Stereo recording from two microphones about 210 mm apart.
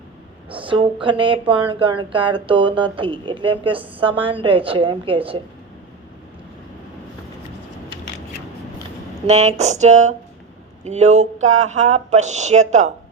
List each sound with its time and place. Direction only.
0.5 s speech: 25° right (ahead or behind)
9.2 s speech: 30° right (ahead or behind)